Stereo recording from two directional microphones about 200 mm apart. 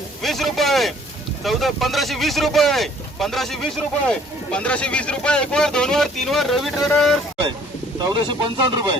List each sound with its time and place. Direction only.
0.2 s a man's voice: centre (ahead or behind)
7.9 s speech: 20° right (ahead or behind)